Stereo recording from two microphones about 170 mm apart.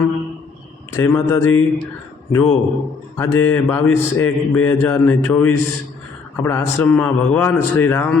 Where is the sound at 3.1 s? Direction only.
15° left (ahead or behind).